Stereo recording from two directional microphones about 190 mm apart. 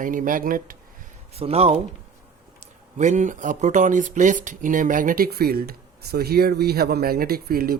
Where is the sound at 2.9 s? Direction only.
40° right (ahead or behind).